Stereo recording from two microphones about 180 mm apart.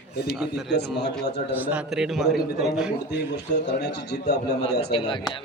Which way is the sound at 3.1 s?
70° left (ahead or behind).